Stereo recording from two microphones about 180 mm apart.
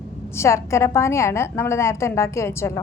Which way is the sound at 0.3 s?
15° left (ahead or behind).